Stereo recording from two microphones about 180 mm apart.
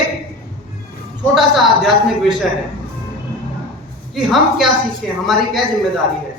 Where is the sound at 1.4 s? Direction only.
Centre (ahead or behind).